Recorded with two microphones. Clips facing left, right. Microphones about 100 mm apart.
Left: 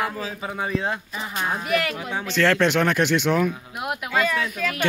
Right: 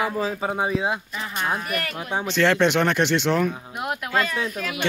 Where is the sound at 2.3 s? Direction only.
Centre (ahead or behind).